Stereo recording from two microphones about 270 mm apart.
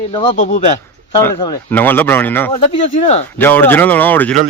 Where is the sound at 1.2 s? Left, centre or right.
Centre.